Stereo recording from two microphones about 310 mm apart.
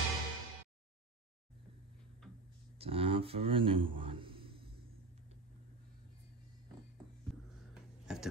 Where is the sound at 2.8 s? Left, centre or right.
Centre.